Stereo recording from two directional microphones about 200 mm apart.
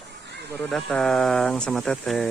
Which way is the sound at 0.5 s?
Centre (ahead or behind).